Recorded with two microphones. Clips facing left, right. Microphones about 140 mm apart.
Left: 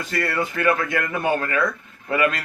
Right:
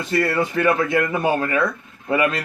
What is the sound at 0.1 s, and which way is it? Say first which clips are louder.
A man's voice: right 5 dB; 25° right (ahead or behind).